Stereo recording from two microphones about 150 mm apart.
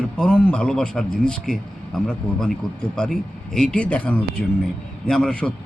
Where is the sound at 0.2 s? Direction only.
5° left (ahead or behind).